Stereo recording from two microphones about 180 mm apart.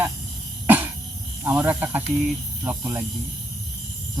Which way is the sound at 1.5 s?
10° right (ahead or behind).